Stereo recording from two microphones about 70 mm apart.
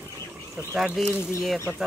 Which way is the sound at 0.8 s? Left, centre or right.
Centre.